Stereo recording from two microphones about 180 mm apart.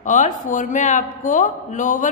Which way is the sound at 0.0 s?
45° left (ahead or behind).